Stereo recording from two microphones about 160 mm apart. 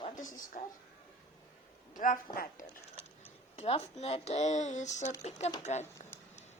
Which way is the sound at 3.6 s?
40° left (ahead or behind).